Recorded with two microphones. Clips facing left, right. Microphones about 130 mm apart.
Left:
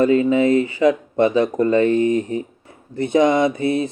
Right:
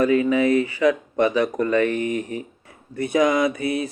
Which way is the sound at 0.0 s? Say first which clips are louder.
Left 3 dB; 30° left (ahead or behind).